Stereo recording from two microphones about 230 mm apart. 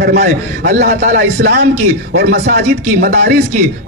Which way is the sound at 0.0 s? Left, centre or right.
Right.